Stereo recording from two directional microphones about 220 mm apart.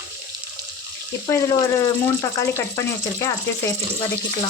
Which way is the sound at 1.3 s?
15° left (ahead or behind).